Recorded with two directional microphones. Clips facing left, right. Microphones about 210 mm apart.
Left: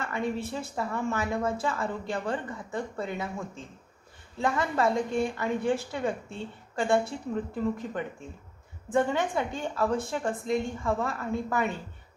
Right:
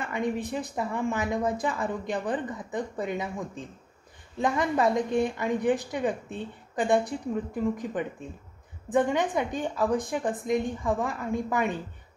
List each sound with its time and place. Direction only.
0.0 s a woman's voice: 15° right (ahead or behind)